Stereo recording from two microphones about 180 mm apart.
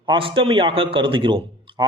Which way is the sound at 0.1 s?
30° right (ahead or behind).